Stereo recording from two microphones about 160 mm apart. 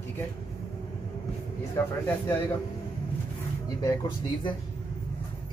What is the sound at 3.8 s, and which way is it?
Speech, 25° left (ahead or behind).